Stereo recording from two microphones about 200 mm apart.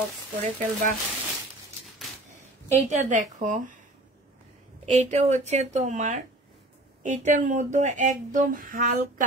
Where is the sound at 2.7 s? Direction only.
35° right (ahead or behind).